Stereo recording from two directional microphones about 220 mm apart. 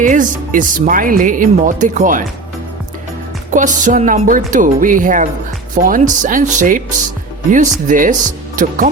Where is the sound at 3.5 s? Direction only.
35° right (ahead or behind).